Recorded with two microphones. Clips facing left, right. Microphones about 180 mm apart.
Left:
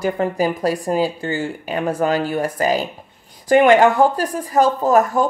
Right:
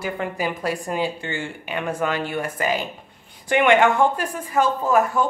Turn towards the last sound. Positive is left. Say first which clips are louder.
# left 4 dB
turn(degrees=40)  # may be behind; listen again after turning